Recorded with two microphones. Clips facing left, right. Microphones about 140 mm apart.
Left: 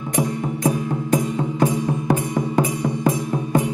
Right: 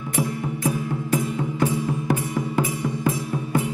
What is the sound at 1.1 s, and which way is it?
Music, 15° left (ahead or behind).